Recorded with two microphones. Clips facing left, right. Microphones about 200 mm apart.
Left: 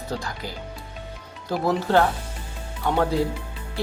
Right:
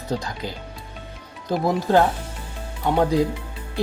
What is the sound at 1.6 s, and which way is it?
Speech, 15° right (ahead or behind).